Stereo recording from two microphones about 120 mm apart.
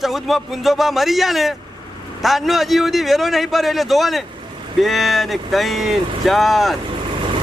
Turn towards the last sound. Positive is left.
turn(degrees=0)  # may be behind; listen again after turning